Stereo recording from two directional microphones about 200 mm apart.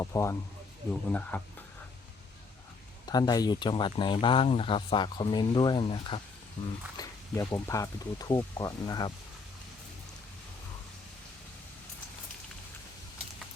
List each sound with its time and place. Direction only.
0.0 s speech: 15° left (ahead or behind)
3.1 s speech: 20° left (ahead or behind)